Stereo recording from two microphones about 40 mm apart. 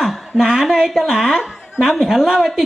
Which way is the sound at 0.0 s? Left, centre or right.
Centre.